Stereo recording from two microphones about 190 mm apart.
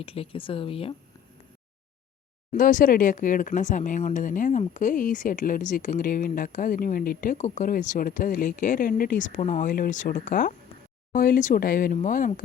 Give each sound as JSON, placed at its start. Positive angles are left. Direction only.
{"t": 0.0, "sound": "speech", "side_deg": 30}
{"t": 2.5, "sound": "speech", "side_deg": 45}